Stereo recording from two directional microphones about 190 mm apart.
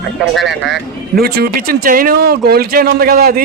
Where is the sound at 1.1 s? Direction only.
55° right (ahead or behind).